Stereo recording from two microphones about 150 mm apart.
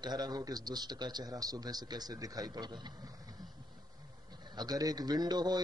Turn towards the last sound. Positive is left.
turn(degrees=-25)  # may be behind; listen again after turning